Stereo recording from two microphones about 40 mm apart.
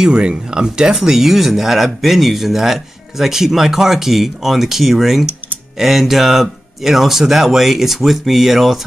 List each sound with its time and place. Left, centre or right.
0.0 s speech: right
0.9 s speech: centre